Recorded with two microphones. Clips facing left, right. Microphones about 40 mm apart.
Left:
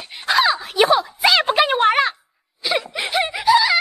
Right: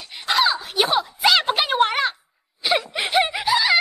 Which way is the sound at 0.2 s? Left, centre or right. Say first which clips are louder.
Left 3 dB; left.